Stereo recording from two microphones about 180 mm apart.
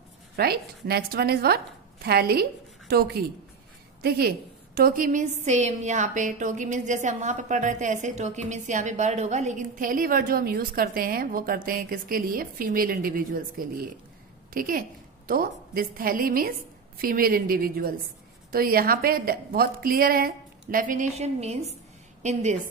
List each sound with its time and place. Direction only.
0.4 s a woman's voice: 60° right (ahead or behind); by 22.6 s 40° right (ahead or behind)